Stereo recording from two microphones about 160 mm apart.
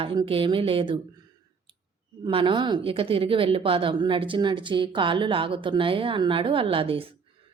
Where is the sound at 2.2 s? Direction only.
30° right (ahead or behind).